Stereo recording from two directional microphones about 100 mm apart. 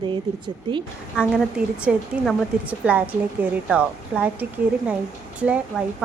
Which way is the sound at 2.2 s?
Centre (ahead or behind).